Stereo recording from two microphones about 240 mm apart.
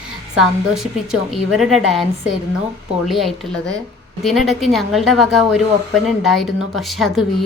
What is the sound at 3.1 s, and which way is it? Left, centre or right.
Speech, centre.